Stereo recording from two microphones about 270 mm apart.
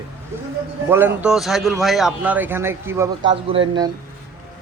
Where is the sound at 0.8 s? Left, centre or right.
Centre.